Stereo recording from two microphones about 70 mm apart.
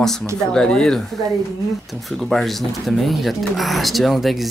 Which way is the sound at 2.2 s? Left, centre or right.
Centre.